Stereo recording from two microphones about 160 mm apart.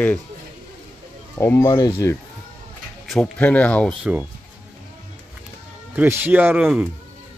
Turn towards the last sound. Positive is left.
turn(degrees=-10)  # may be behind; listen again after turning